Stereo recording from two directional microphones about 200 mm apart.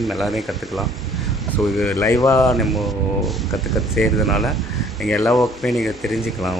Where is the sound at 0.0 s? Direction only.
Centre (ahead or behind).